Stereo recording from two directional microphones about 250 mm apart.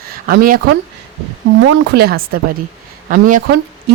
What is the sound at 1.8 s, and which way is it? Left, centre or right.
Speech, right.